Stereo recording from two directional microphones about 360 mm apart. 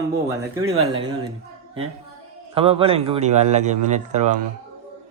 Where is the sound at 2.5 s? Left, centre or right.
Centre.